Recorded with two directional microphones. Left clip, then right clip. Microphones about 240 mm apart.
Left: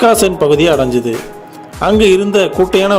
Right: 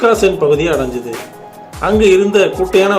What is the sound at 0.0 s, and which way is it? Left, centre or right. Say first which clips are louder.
Speech: left 1 dB; left.